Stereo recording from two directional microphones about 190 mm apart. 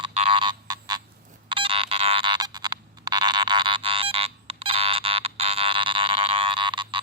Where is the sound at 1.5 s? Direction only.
30° right (ahead or behind).